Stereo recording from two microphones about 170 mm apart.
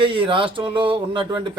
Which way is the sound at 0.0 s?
30° right (ahead or behind).